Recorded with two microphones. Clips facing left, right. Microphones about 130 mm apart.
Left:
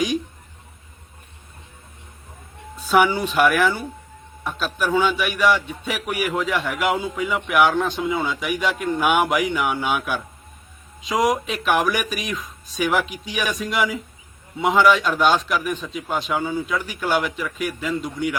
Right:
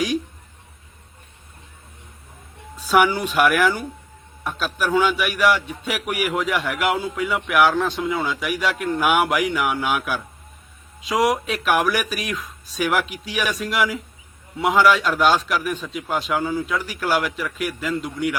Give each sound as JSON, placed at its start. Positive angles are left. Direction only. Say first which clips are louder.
{"t": 2.7, "sound": "a man's voice", "louder": "even", "side_deg": -10}